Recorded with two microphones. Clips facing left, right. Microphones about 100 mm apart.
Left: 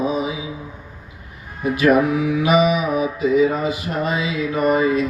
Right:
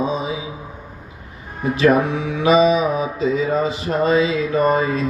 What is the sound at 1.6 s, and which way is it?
Mantra, 30° right (ahead or behind).